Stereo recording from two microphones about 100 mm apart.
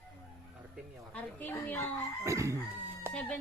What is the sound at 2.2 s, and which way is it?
Chicken, 30° right (ahead or behind).